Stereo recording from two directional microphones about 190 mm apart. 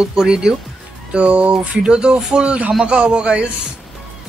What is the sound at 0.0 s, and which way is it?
Speech, 5° right (ahead or behind).